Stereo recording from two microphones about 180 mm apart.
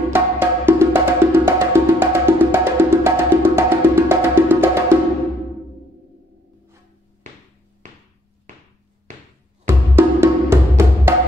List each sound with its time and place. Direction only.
0.1 s music: 10° right (ahead or behind)
9.1 s music: 40° right (ahead or behind)
9.7 s music: 15° right (ahead or behind)